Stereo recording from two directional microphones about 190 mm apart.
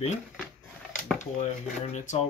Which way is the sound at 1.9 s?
40° left (ahead or behind).